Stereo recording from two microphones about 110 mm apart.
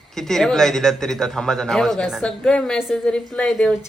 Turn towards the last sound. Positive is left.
turn(degrees=10)  # may be behind; listen again after turning